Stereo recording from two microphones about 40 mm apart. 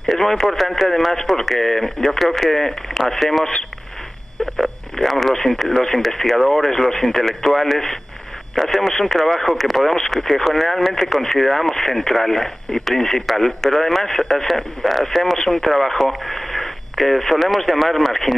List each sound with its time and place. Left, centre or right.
0.1 s speech: centre
4.6 s speech: centre